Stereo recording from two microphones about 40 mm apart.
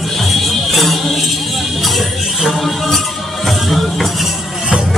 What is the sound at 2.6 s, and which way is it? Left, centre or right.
Music, centre.